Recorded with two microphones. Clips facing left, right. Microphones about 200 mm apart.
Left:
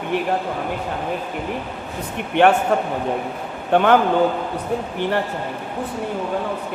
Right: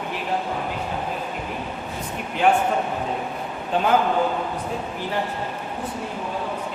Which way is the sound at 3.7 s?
65° left (ahead or behind).